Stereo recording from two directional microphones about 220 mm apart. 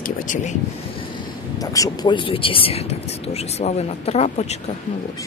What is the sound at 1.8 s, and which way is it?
Speech, 20° left (ahead or behind).